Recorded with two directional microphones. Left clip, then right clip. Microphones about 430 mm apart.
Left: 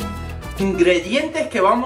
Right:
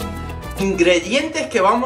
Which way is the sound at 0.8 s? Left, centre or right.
Centre.